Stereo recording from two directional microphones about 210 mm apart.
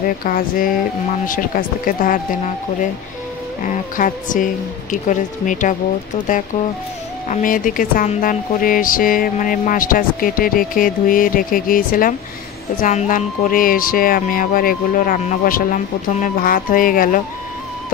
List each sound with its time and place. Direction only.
0.2 s speech: 40° left (ahead or behind)
7.2 s speech: 40° left (ahead or behind)